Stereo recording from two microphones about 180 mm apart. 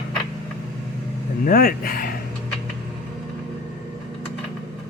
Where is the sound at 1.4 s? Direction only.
55° left (ahead or behind).